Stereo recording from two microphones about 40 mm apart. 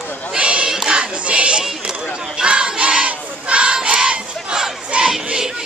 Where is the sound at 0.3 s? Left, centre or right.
Right.